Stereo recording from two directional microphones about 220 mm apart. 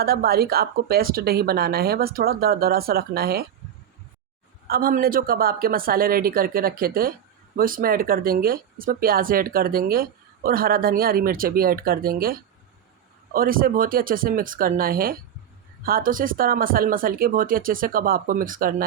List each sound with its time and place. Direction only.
0.0 s speech: 45° right (ahead or behind)
4.7 s speech: 40° right (ahead or behind)